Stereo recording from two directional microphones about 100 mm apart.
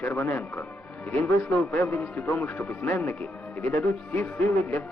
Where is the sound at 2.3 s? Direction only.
20° left (ahead or behind).